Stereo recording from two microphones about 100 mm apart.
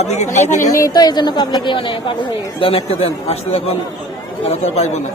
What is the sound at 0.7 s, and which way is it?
A woman's voice, 35° left (ahead or behind).